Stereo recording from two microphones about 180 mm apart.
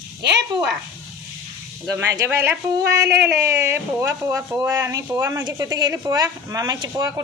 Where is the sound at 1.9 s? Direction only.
15° right (ahead or behind).